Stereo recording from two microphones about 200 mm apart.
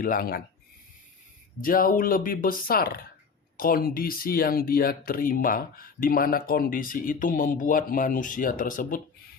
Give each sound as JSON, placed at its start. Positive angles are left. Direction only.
{"t": 0.0, "sound": "speech", "side_deg": 45}
{"t": 1.6, "sound": "speech", "side_deg": 45}